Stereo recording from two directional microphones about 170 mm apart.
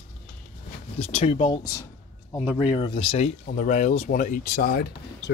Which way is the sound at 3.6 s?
50° left (ahead or behind).